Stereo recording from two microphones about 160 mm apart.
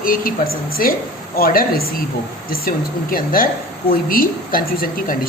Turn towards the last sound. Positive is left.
turn(degrees=60)  # may be behind; listen again after turning